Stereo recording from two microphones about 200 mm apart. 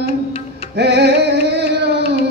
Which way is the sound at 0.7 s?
55° right (ahead or behind).